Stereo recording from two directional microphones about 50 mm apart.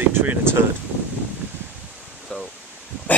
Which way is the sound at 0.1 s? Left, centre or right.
Right.